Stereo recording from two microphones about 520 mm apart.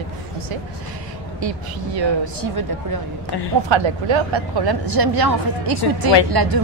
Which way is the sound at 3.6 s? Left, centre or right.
Right.